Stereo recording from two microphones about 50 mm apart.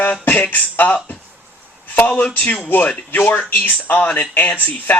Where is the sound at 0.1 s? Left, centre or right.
Left.